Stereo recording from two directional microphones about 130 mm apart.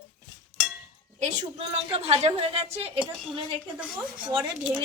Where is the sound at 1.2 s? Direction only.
55° right (ahead or behind).